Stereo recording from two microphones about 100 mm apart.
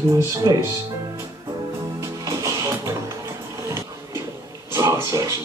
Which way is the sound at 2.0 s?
35° right (ahead or behind).